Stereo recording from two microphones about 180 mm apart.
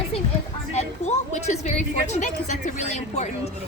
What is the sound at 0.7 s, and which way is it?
A child's voice, 40° left (ahead or behind).